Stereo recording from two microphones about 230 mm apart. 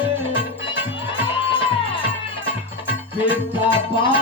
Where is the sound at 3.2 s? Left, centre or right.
Left.